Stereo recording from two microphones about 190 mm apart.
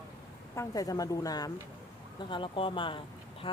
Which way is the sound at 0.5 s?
15° left (ahead or behind).